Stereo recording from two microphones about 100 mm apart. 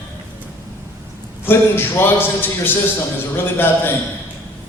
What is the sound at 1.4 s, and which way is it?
A man's voice, 20° left (ahead or behind).